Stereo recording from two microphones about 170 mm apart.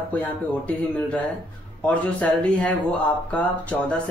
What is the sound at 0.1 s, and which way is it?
Speech, 10° left (ahead or behind).